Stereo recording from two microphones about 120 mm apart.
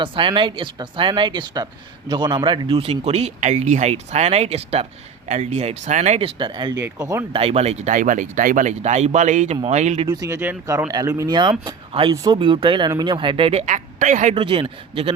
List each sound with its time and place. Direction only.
0.0 s speech: 45° right (ahead or behind)
5.3 s speech: 80° right; by 6.7 s 40° right (ahead or behind)
6.8 s speech: 25° right (ahead or behind)
7.3 s speech: 55° right (ahead or behind); by 9.6 s 90° right
9.6 s speech: 70° right (ahead or behind)
10.1 s speech: 25° right (ahead or behind); by 13.7 s 55° right (ahead or behind)
13.7 s speech: 90° right
14.3 s speech: 50° right (ahead or behind)